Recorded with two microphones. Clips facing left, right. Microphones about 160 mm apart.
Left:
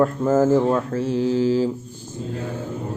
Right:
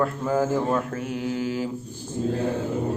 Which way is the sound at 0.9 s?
30° left (ahead or behind).